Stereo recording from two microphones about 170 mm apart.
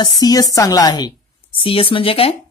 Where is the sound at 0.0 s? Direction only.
20° left (ahead or behind).